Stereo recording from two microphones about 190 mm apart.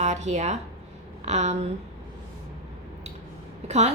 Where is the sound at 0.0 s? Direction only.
40° right (ahead or behind).